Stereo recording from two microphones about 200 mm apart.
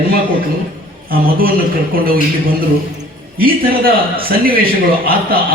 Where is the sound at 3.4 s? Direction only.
45° right (ahead or behind).